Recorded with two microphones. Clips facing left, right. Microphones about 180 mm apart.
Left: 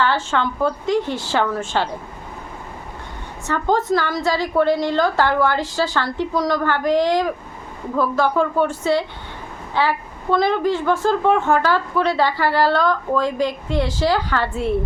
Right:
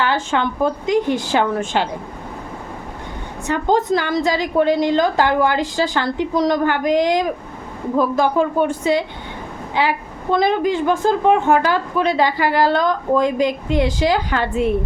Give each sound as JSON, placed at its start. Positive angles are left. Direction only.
{"t": 0.0, "sound": "a woman's voice", "side_deg": -15}
{"t": 3.4, "sound": "a woman's voice", "side_deg": -15}